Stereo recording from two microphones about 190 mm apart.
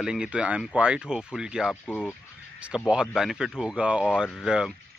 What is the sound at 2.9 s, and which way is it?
Speech, 5° right (ahead or behind).